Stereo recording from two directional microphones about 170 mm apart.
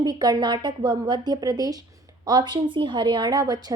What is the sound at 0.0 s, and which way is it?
A woman's voice, 20° right (ahead or behind).